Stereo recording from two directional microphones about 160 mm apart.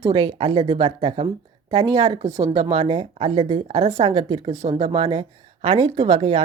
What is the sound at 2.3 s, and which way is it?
Speech, 20° right (ahead or behind).